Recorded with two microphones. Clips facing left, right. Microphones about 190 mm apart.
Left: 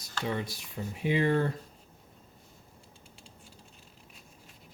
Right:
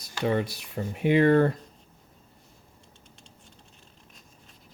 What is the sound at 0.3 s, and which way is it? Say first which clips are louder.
Speech: right 8 dB; 65° right (ahead or behind).